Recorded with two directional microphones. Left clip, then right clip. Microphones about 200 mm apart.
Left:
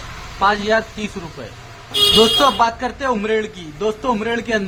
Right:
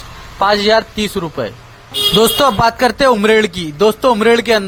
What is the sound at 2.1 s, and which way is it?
Speech, 40° right (ahead or behind).